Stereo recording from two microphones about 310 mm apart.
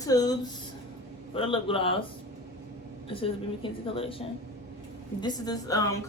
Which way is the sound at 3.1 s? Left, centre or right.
Centre.